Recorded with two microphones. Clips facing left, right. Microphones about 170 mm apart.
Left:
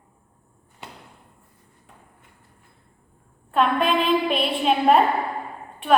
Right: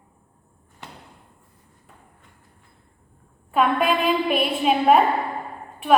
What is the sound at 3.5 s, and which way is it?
A woman's voice, 5° right (ahead or behind).